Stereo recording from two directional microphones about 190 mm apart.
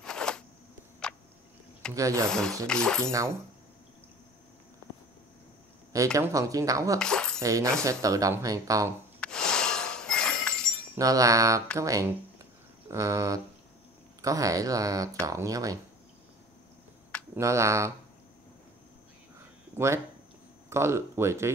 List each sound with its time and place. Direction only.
0.0 s a sound: 5° left (ahead or behind)
2.0 s speech: 15° right (ahead or behind)
2.2 s speech: 5° left (ahead or behind)
3.1 s speech: 15° right (ahead or behind)
6.1 s speech: 15° right (ahead or behind)
7.0 s speech: 5° left (ahead or behind)
7.3 s speech: 15° right (ahead or behind)
9.2 s glass: 5° left (ahead or behind)
11.0 s speech: 15° right (ahead or behind)
17.4 s speech: 15° right (ahead or behind)
20.7 s speech: 15° right (ahead or behind)